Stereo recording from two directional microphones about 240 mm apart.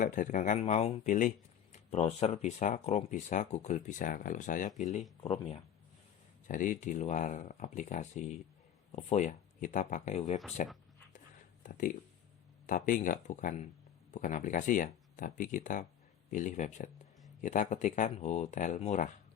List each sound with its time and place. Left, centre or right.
0.0 s speech: left
11.6 s speech: left